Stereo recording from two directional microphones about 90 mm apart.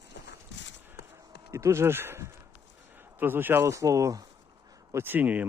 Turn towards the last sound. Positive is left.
turn(degrees=-20)  # may be behind; listen again after turning